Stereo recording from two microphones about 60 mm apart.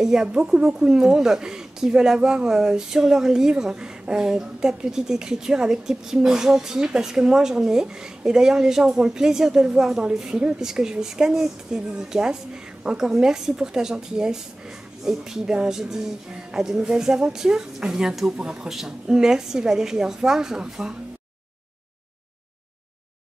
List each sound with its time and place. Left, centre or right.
0.0 s a woman's voice: centre